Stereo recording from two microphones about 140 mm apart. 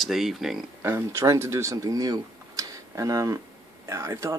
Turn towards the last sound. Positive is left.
turn(degrees=-20)  # may be behind; listen again after turning